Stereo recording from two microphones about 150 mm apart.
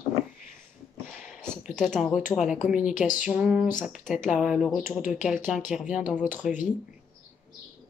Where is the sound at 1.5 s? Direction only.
5° left (ahead or behind).